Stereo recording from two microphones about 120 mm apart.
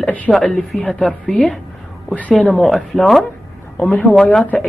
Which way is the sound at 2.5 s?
Centre (ahead or behind).